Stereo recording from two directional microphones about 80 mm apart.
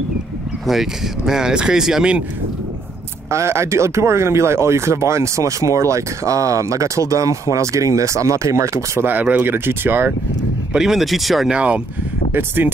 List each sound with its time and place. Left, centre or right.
0.7 s speech: centre
3.3 s speech: right
9.0 s speech: right
10.7 s speech: centre
11.5 s speech: centre
12.3 s speech: right